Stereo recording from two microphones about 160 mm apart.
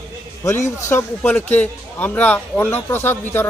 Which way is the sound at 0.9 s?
15° left (ahead or behind).